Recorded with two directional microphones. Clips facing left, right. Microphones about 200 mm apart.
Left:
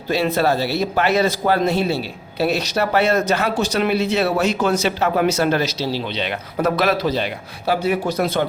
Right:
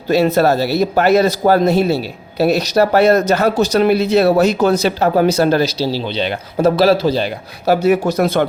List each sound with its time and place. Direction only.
0.1 s speech: 40° right (ahead or behind)
7.7 s speech: 45° right (ahead or behind)